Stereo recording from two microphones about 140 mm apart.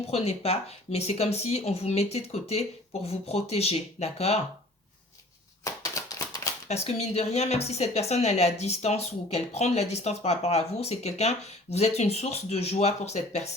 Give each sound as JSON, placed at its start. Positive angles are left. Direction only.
{"t": 0.1, "sound": "a woman's voice", "side_deg": 45}
{"t": 5.6, "sound": "a sound", "side_deg": 25}
{"t": 6.7, "sound": "a woman's voice", "side_deg": 50}